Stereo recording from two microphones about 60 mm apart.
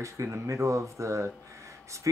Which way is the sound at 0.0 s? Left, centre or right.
Right.